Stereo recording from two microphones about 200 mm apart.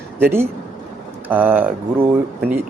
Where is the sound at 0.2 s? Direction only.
10° right (ahead or behind).